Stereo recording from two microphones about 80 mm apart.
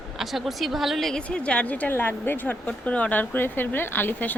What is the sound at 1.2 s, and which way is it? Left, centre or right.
Speech, centre.